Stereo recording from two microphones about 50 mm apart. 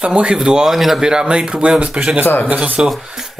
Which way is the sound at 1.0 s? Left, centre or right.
Centre.